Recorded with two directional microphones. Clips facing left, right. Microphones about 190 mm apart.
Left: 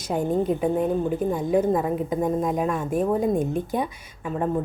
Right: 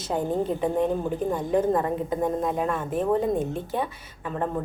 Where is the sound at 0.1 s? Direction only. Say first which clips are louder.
Left 3 dB; 10° left (ahead or behind).